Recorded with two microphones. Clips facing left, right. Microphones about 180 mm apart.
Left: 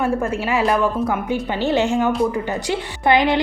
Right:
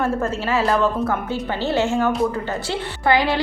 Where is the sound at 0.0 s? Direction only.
15° left (ahead or behind).